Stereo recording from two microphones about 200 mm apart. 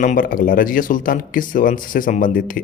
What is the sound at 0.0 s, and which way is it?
Speech, 40° left (ahead or behind).